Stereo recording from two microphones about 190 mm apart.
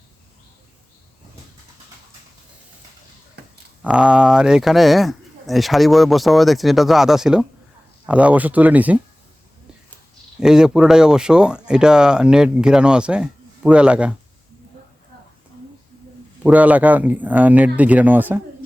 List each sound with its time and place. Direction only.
3.4 s a sound: 60° right (ahead or behind)
3.8 s a man's voice: 5° right (ahead or behind)
10.4 s speech: 5° right (ahead or behind)
16.4 s a man's voice: 10° right (ahead or behind)